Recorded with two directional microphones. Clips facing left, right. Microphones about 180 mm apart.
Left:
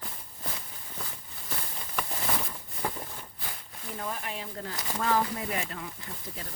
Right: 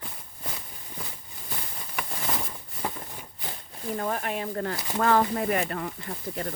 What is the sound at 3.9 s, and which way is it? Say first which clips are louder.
Speech: right 7 dB; 55° right (ahead or behind).